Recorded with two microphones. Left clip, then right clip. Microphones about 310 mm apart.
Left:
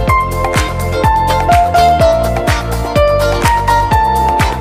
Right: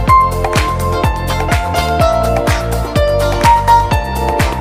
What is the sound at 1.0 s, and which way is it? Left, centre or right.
Music, centre.